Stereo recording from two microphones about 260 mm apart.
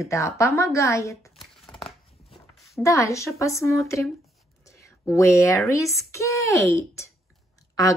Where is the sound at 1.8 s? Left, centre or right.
Centre.